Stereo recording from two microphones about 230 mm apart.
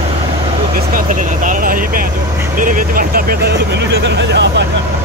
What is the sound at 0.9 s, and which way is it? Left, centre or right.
Vehicle, right.